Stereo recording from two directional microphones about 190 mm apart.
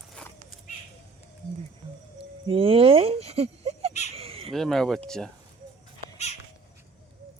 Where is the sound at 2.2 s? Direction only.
30° right (ahead or behind).